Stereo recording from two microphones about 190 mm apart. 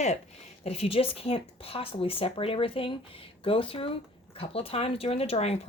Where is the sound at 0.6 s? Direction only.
30° left (ahead or behind).